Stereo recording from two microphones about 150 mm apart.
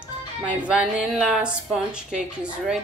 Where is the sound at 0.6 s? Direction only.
10° right (ahead or behind).